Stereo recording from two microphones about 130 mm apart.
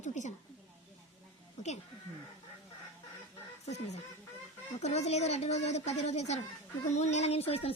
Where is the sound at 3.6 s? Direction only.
60° left (ahead or behind).